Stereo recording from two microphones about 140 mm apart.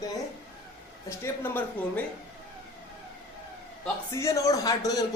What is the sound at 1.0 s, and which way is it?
Speech, 15° left (ahead or behind).